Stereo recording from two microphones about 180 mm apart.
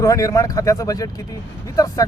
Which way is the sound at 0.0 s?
20° left (ahead or behind).